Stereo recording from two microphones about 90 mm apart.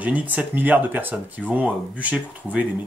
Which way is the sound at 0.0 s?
15° right (ahead or behind).